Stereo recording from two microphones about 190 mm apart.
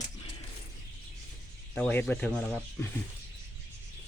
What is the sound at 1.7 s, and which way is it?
Speech, 5° left (ahead or behind).